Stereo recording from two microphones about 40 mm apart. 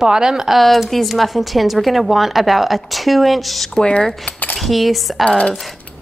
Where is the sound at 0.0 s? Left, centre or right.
Centre.